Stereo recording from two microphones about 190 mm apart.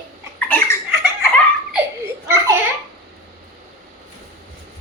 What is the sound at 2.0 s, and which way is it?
Baby laughter, 10° right (ahead or behind).